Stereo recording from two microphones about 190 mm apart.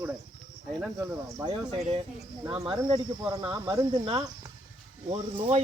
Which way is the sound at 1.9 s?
25° right (ahead or behind).